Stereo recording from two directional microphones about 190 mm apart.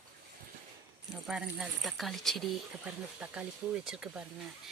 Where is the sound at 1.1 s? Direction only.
5° right (ahead or behind).